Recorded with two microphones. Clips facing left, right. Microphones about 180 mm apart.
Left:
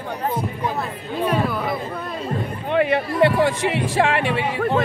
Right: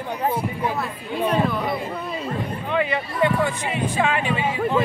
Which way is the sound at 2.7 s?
60° left (ahead or behind).